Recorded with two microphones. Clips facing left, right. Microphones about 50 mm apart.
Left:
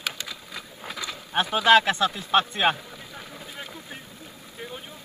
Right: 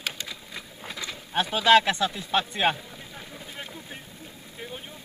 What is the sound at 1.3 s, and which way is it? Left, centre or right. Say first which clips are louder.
A man's voice: left 1 dB; left.